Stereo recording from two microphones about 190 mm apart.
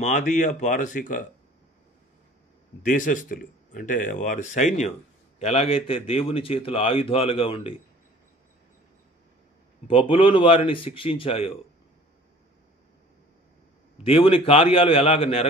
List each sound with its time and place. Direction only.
0.0 s speech: 40° left (ahead or behind)
2.8 s speech: 40° left (ahead or behind)
9.8 s speech: 30° left (ahead or behind)
14.0 s speech: 30° left (ahead or behind)